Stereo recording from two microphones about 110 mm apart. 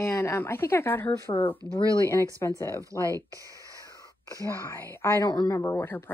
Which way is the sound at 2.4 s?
30° left (ahead or behind).